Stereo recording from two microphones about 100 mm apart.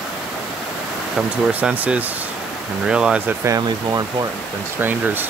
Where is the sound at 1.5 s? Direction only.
15° right (ahead or behind).